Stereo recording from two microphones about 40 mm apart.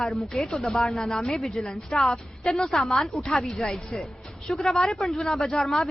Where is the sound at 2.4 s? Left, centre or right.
Centre.